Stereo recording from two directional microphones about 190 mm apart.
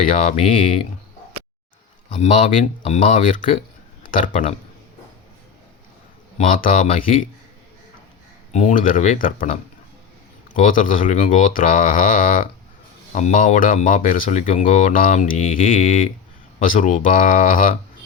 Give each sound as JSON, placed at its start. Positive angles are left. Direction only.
{"t": 0.2, "sound": "speech", "side_deg": 35}
{"t": 2.0, "sound": "speech", "side_deg": 40}
{"t": 6.3, "sound": "speech", "side_deg": 45}
{"t": 8.5, "sound": "speech", "side_deg": 40}